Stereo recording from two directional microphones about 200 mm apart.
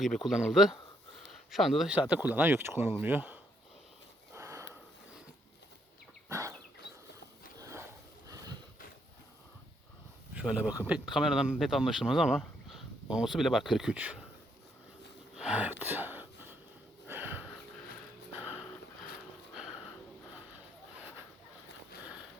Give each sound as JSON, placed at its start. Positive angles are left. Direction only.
{"t": 0.0, "sound": "speech", "side_deg": 0}
{"t": 4.4, "sound": "a sound", "side_deg": -15}
{"t": 6.2, "sound": "a sound", "side_deg": -15}
{"t": 7.6, "sound": "a sound", "side_deg": -15}
{"t": 10.3, "sound": "speech", "side_deg": -5}
{"t": 15.4, "sound": "gasp", "side_deg": -5}
{"t": 17.1, "sound": "sniff", "side_deg": -10}
{"t": 18.3, "sound": "dog", "side_deg": -5}
{"t": 19.5, "sound": "sniff", "side_deg": -5}